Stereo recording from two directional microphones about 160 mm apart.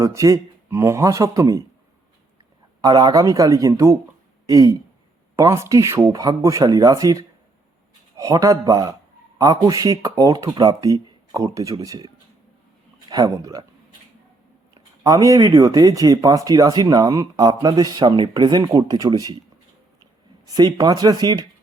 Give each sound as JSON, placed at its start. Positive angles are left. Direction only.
{"t": 0.0, "sound": "speech", "side_deg": -20}
{"t": 2.8, "sound": "speech", "side_deg": -25}
{"t": 15.0, "sound": "speech", "side_deg": -20}
{"t": 20.4, "sound": "speech", "side_deg": -25}